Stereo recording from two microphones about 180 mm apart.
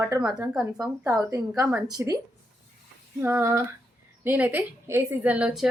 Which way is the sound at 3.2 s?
15° right (ahead or behind).